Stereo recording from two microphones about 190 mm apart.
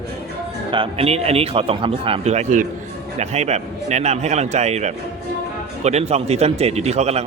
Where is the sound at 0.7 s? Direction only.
30° right (ahead or behind).